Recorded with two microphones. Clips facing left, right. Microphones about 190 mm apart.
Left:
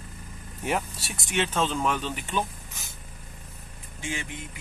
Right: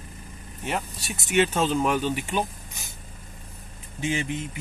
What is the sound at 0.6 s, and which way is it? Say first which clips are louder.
Speech: left 1 dB; 5° left (ahead or behind).